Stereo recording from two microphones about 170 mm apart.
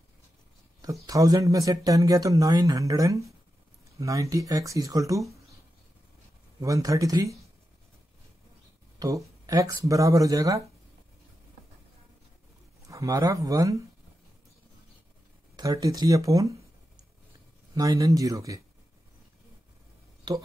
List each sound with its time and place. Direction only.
1.0 s speech: 20° right (ahead or behind)
6.6 s speech: 20° right (ahead or behind)
9.0 s speech: 20° right (ahead or behind)
12.8 s speech: 20° right (ahead or behind)
15.5 s speech: 20° right (ahead or behind)
17.7 s speech: 20° right (ahead or behind)
20.3 s speech: 25° right (ahead or behind)